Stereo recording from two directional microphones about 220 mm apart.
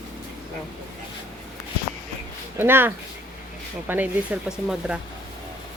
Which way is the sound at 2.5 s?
10° right (ahead or behind).